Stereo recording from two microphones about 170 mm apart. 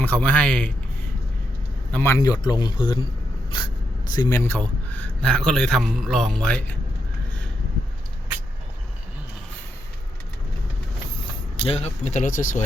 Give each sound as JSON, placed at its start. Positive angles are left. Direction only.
{"t": 0.0, "sound": "speech", "side_deg": 10}
{"t": 1.9, "sound": "speech", "side_deg": 15}
{"t": 4.1, "sound": "a man's voice", "side_deg": 20}
{"t": 11.5, "sound": "speech", "side_deg": 35}